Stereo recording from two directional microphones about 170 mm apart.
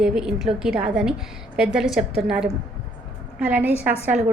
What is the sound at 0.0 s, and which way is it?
A woman's voice, 5° right (ahead or behind).